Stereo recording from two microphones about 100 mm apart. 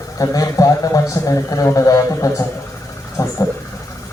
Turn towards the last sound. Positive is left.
turn(degrees=35)  # may be behind; listen again after turning